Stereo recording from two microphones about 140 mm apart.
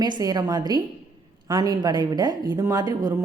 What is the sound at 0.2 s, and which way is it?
Speech, 30° right (ahead or behind).